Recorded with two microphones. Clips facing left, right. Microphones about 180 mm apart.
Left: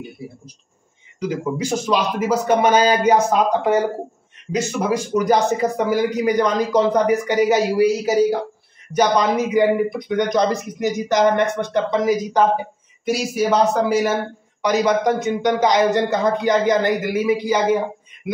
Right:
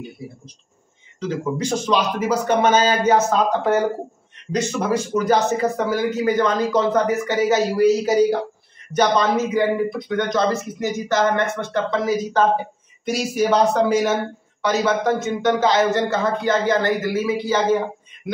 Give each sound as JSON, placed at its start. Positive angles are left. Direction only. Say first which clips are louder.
{"t": 1.2, "sound": "speech", "louder": "left 1 dB", "side_deg": 10}